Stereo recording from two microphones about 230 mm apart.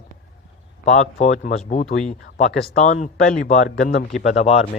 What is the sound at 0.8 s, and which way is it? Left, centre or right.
Speech, left.